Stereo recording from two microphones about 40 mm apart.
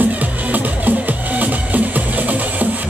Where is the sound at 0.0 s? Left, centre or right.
Right.